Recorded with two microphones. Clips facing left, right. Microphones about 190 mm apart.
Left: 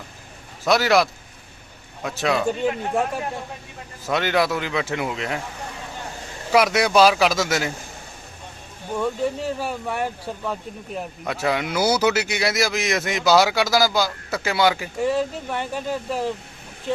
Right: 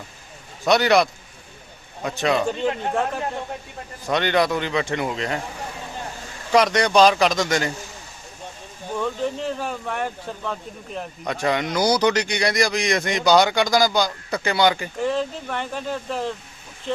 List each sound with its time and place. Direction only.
0.6 s speech: centre (ahead or behind)
2.0 s speech: centre (ahead or behind)
4.0 s speech: 5° left (ahead or behind)
6.5 s speech: 5° left (ahead or behind)
9.0 s speech: 10° left (ahead or behind)